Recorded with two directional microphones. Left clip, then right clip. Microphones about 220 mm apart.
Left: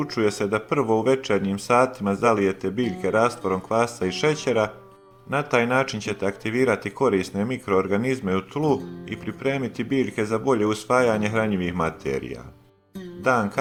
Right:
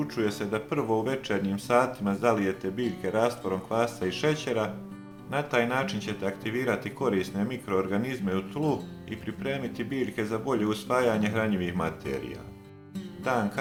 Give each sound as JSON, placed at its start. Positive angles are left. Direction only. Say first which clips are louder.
{"t": 0.0, "sound": "speech", "louder": "left 7 dB", "side_deg": 30}